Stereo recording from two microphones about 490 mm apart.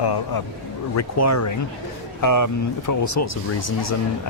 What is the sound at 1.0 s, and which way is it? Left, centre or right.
Speech, left.